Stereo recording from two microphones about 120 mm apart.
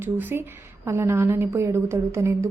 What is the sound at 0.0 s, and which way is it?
A woman's voice, 20° right (ahead or behind).